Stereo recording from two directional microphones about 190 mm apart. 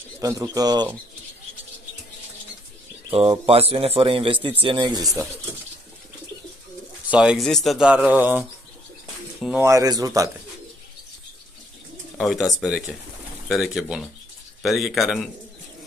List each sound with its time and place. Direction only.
0.2 s speech: 20° right (ahead or behind)
3.1 s speech: 30° right (ahead or behind)
7.1 s speech: 5° right (ahead or behind)
9.7 s speech: 20° right (ahead or behind)
12.2 s speech: centre (ahead or behind)